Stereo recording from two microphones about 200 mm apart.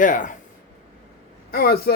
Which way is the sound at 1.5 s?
50° left (ahead or behind).